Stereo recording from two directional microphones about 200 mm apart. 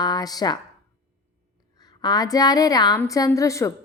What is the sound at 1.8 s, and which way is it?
A woman's voice, 20° left (ahead or behind).